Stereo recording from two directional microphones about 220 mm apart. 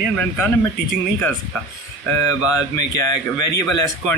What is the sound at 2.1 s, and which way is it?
Speech, 15° left (ahead or behind).